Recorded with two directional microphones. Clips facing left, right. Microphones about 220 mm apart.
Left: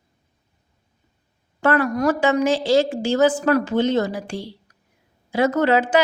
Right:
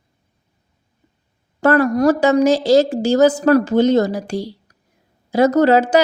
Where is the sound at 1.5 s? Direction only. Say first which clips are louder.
Right 5 dB; 40° right (ahead or behind).